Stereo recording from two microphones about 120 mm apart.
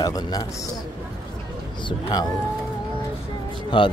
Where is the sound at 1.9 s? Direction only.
35° left (ahead or behind).